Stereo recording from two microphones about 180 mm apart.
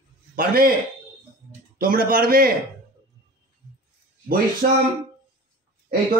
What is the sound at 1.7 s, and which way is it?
Speech, 55° right (ahead or behind).